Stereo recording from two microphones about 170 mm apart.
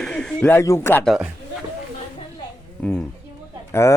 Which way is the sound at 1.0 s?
Centre (ahead or behind).